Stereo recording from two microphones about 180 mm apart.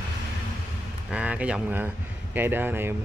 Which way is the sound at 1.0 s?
5° right (ahead or behind).